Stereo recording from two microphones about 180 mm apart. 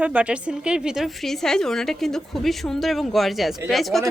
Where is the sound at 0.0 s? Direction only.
10° right (ahead or behind).